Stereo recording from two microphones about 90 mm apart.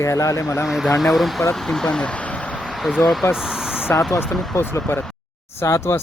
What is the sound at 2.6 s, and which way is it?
Vehicle, centre (ahead or behind).